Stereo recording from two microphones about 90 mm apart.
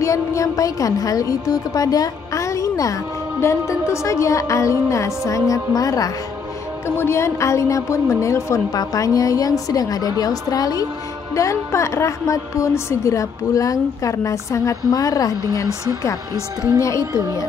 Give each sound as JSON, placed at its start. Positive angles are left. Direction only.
{"t": 0.0, "sound": "a woman's voice", "side_deg": 35}
{"t": 7.0, "sound": "a woman's voice", "side_deg": 30}